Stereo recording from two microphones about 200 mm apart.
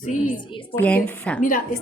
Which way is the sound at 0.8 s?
10° left (ahead or behind).